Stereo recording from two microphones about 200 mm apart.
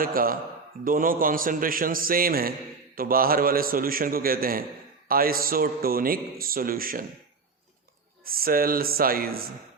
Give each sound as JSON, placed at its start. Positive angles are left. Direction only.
{"t": 0.0, "sound": "a man's voice", "side_deg": -45}
{"t": 8.2, "sound": "a man's voice", "side_deg": -45}